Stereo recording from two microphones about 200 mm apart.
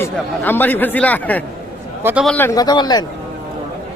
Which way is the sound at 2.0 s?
10° right (ahead or behind).